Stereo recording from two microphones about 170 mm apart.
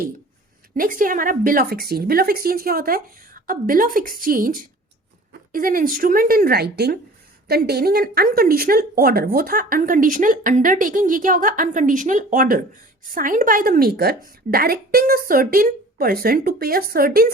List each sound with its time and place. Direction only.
0.8 s speech: 55° right (ahead or behind)